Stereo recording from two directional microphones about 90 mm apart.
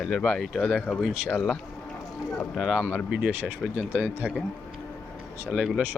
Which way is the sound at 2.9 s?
15° right (ahead or behind).